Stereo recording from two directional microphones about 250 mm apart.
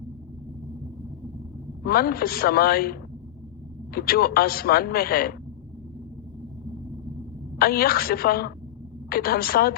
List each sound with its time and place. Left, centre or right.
1.8 s a man's voice: left
7.6 s a man's voice: left